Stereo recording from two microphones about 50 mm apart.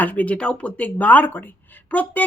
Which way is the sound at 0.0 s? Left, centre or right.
Left.